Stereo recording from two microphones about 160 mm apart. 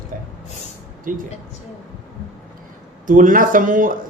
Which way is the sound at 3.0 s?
55° right (ahead or behind).